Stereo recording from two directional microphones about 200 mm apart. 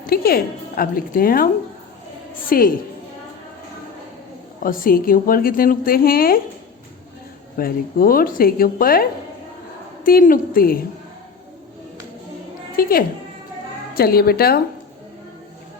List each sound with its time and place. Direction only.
0.1 s a woman's voice: 50° left (ahead or behind)
2.5 s a woman's voice: 45° left (ahead or behind)
4.6 s a woman's voice: 45° left (ahead or behind)
7.5 s a woman's voice: 45° left (ahead or behind)
12.7 s a woman's voice: 45° left (ahead or behind)